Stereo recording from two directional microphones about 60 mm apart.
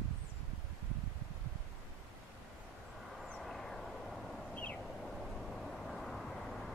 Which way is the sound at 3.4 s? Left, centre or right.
Centre.